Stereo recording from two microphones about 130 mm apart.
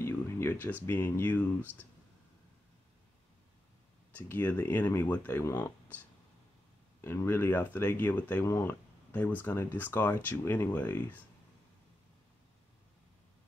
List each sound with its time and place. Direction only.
0.0 s a sound: 20° left (ahead or behind)
0.8 s speech: 15° left (ahead or behind)
4.2 s speech: 15° left (ahead or behind)
7.0 s speech: 20° left (ahead or behind)